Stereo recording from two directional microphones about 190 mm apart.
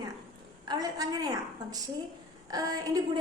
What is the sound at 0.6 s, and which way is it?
A woman's voice, 20° right (ahead or behind).